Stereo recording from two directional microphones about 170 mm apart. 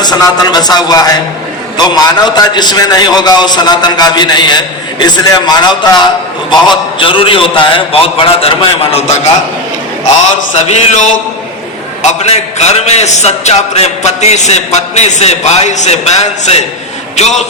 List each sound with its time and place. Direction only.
0.0 s a man's voice: 25° left (ahead or behind)
10.5 s a sound: 45° left (ahead or behind)
12.2 s a man's voice: 40° left (ahead or behind)